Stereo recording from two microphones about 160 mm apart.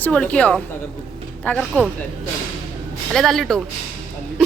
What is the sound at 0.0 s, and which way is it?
A woman's voice, 10° left (ahead or behind).